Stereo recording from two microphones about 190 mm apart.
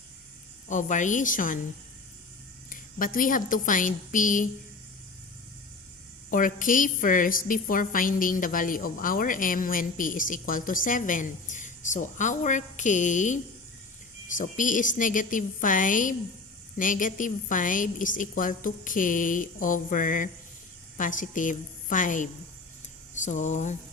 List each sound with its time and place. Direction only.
0.7 s a woman's voice: 40° left (ahead or behind)
2.6 s a woman's voice: 45° left (ahead or behind)
6.3 s a woman's voice: 45° left (ahead or behind)